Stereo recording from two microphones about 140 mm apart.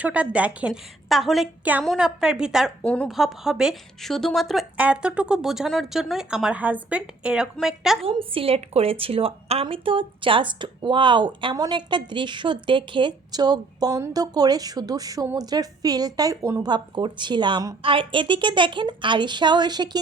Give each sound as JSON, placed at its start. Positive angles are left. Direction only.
{"t": 0.0, "sound": "a woman's voice", "side_deg": -10}
{"t": 2.8, "sound": "a woman's voice", "side_deg": 10}
{"t": 3.1, "sound": "a woman's voice", "side_deg": 0}
{"t": 8.0, "sound": "a woman's voice", "side_deg": -40}